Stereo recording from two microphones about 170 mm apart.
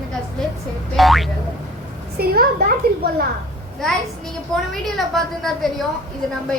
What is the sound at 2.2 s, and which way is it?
Speech, 65° right (ahead or behind).